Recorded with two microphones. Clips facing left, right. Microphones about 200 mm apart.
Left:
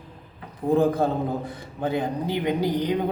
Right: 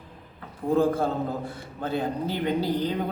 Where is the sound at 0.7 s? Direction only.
20° left (ahead or behind).